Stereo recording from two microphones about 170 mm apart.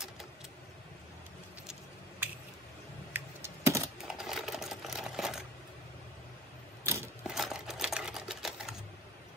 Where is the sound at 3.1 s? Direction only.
15° right (ahead or behind).